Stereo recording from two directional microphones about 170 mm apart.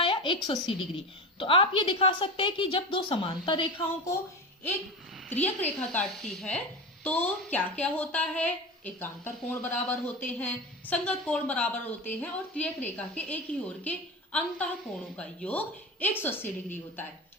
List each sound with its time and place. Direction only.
0.0 s a woman's voice: 30° left (ahead or behind)
5.3 s a woman's voice: 10° left (ahead or behind)
15.1 s a woman's voice: 5° left (ahead or behind)